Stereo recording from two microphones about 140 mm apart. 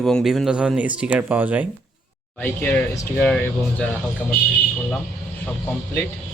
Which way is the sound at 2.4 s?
15° left (ahead or behind).